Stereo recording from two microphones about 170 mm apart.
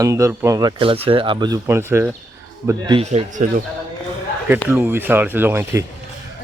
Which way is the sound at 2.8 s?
30° right (ahead or behind).